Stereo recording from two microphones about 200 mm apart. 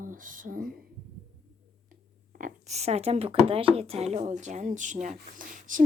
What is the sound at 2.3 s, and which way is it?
A woman's voice, 40° right (ahead or behind).